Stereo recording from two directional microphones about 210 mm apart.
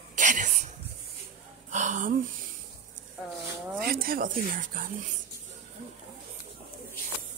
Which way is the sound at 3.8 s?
45° right (ahead or behind).